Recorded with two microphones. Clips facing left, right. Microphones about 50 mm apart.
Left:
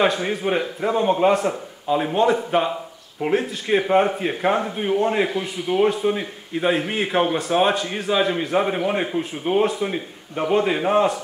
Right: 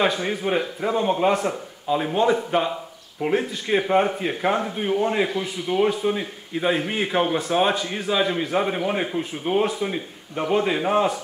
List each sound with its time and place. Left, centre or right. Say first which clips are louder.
0.0 s a man's voice: left 2 dB; centre